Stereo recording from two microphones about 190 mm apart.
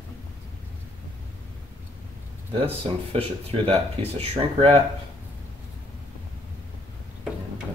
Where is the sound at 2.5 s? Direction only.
30° right (ahead or behind).